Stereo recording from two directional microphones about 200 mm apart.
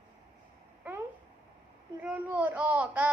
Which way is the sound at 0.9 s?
10° right (ahead or behind).